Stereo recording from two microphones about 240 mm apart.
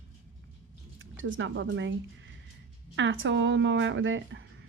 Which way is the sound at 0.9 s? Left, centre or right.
Right.